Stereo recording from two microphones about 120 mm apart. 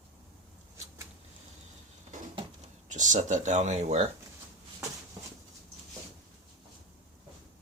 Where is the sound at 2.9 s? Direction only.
90° right; by 4.0 s 70° right (ahead or behind).